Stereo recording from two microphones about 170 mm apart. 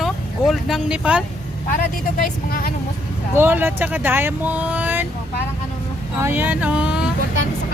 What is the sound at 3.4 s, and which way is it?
Speech, 10° right (ahead or behind).